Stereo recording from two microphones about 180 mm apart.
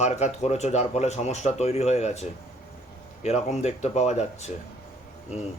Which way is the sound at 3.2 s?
35° left (ahead or behind).